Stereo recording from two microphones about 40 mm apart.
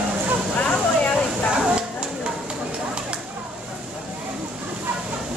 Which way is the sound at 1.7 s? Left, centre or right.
Right.